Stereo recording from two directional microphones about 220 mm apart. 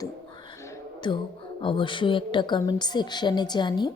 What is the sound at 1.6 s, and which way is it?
A woman's voice, 20° left (ahead or behind).